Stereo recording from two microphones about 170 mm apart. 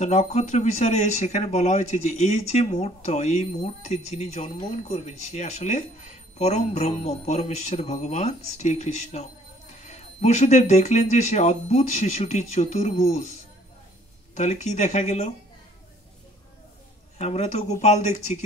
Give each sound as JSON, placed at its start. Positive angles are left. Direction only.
{"t": 0.0, "sound": "speech", "side_deg": 40}
{"t": 17.2, "sound": "speech", "side_deg": 40}